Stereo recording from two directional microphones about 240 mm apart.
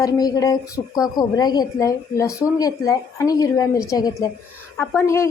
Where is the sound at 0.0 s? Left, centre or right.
Centre.